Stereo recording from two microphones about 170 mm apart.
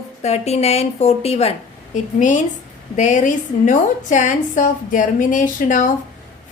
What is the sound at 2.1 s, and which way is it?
A woman's voice, 50° left (ahead or behind).